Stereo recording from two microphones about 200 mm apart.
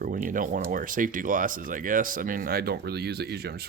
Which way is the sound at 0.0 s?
45° right (ahead or behind).